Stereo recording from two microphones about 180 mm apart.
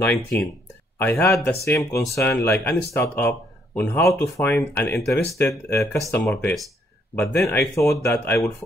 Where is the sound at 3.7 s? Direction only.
15° left (ahead or behind).